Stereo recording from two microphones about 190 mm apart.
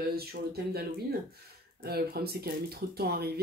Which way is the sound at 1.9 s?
55° right (ahead or behind).